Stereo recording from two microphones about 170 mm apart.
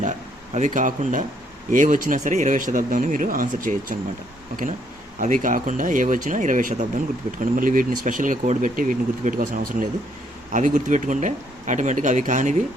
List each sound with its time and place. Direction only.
0.0 s a sound: 45° right (ahead or behind)
1.7 s speech: 50° right (ahead or behind)
5.2 s speech: 50° right (ahead or behind)